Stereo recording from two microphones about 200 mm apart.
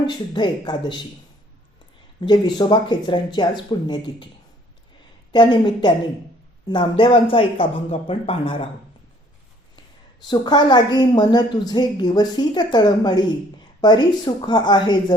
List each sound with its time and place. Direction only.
0.0 s a woman's voice: 20° left (ahead or behind)
2.2 s a woman's voice: 20° left (ahead or behind)
5.3 s a woman's voice: 25° left (ahead or behind)
10.2 s a woman's voice: 20° left (ahead or behind)